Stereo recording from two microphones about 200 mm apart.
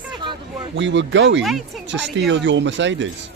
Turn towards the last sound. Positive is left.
turn(degrees=-65)  # may be behind; listen again after turning